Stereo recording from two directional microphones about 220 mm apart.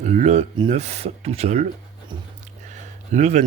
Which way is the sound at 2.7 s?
30° right (ahead or behind).